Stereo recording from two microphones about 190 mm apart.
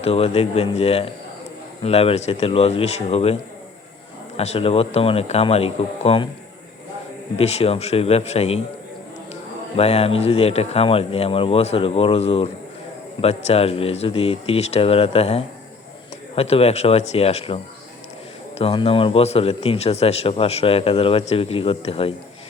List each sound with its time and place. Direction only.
0.0 s a man's voice: 30° left (ahead or behind)
4.4 s a man's voice: 35° left (ahead or behind)
7.3 s a man's voice: 35° left (ahead or behind)
9.7 s a man's voice: 30° left (ahead or behind)